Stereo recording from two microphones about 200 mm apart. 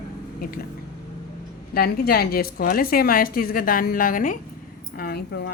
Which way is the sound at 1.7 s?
50° left (ahead or behind).